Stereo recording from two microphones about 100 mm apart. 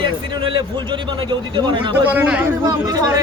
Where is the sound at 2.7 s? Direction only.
40° right (ahead or behind).